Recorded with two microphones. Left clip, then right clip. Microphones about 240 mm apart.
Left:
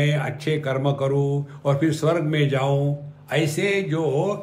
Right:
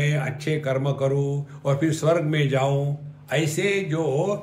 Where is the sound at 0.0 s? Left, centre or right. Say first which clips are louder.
Left 2 dB; centre.